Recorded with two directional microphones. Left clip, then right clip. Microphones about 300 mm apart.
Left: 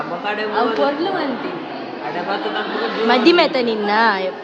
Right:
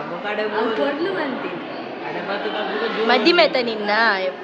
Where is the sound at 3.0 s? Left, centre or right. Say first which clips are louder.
Left 2 dB; centre.